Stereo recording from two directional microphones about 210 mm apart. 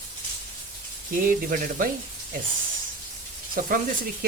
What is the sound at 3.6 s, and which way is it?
Speech, 40° right (ahead or behind).